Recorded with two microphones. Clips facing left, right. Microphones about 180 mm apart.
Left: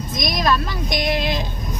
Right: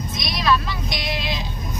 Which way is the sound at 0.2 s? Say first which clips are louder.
Left 1 dB; 45° left (ahead or behind).